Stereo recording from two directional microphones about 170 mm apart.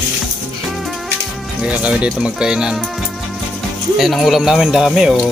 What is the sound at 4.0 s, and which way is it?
Speech, centre (ahead or behind).